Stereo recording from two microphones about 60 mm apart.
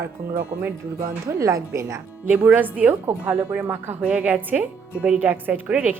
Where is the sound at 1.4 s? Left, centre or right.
Right.